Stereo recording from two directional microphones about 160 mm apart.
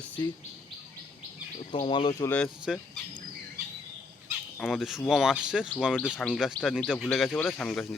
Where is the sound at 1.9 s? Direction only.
30° left (ahead or behind).